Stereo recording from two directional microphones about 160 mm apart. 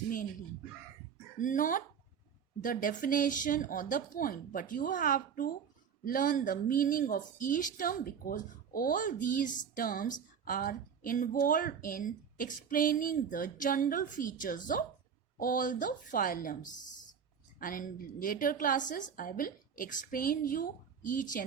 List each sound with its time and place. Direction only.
1.4 s speech: 55° left (ahead or behind)